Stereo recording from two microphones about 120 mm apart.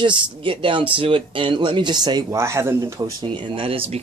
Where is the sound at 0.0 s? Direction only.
45° right (ahead or behind).